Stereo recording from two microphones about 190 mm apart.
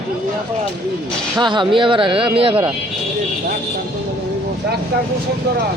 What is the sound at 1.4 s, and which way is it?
Speech, 25° right (ahead or behind).